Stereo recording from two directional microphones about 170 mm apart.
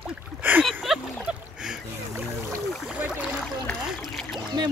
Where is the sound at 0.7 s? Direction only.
5° right (ahead or behind).